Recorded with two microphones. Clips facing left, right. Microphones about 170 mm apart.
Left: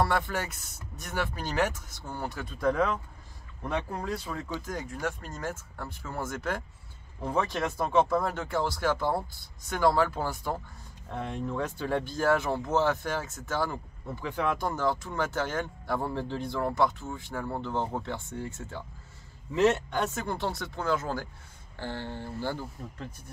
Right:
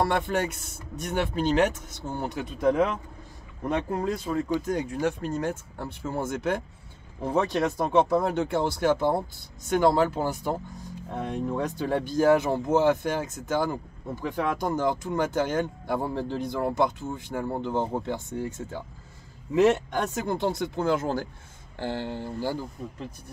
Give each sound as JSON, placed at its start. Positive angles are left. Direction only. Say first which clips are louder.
{"t": 0.0, "sound": "speech", "louder": "right 3 dB", "side_deg": -20}
{"t": 20.2, "sound": "speech", "louder": "right 5 dB", "side_deg": -20}